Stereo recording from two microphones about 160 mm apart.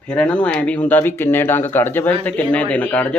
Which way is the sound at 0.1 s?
10° left (ahead or behind).